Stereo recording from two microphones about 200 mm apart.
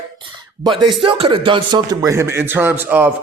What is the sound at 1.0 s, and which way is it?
A man's voice, 25° right (ahead or behind).